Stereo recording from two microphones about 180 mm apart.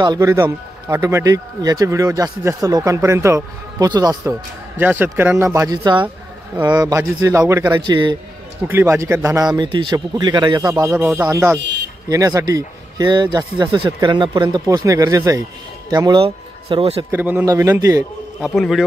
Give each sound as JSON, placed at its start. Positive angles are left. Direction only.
{"t": 0.0, "sound": "speech", "side_deg": -20}
{"t": 8.6, "sound": "speech", "side_deg": -15}
{"t": 17.1, "sound": "speech", "side_deg": -10}
{"t": 18.4, "sound": "a man's voice", "side_deg": 0}